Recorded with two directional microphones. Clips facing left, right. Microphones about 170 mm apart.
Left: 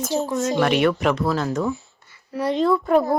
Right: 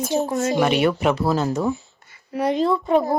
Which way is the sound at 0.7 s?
Centre (ahead or behind).